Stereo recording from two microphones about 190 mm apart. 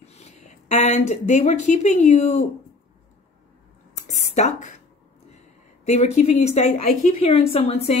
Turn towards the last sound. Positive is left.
turn(degrees=35)  # may be behind; listen again after turning